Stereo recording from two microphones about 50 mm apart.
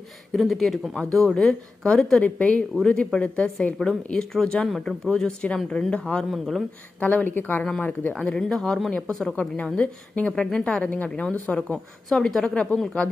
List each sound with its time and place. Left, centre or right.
0.3 s a woman's voice: centre
2.2 s a woman's voice: left
2.7 s a woman's voice: centre
3.4 s a woman's voice: left
6.3 s speech: centre
7.0 s speech: left
7.2 s speech: left
8.1 s a woman's voice: centre
8.5 s speech: centre
8.9 s a woman's voice: centre
12.1 s a woman's voice: centre